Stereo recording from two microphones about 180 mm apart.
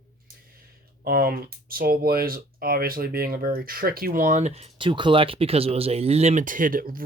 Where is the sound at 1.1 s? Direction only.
55° right (ahead or behind).